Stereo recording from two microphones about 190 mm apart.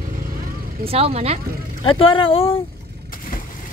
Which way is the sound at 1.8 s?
30° left (ahead or behind).